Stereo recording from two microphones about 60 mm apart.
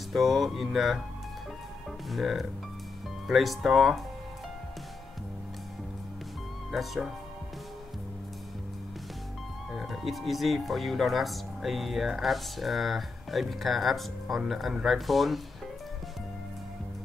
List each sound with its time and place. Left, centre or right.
0.1 s speech: centre
2.0 s speech: centre
6.7 s speech: centre
9.7 s speech: centre